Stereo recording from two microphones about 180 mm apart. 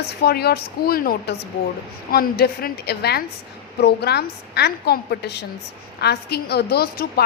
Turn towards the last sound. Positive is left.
turn(degrees=60)  # may be behind; listen again after turning